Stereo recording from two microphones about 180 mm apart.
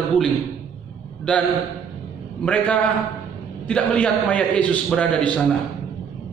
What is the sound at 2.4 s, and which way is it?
A man's voice, 5° left (ahead or behind).